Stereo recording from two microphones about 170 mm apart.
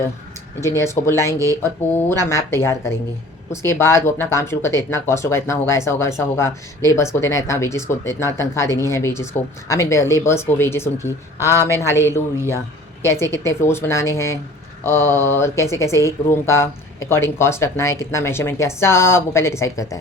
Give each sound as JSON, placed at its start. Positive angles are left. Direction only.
{"t": 0.6, "sound": "speech", "side_deg": 15}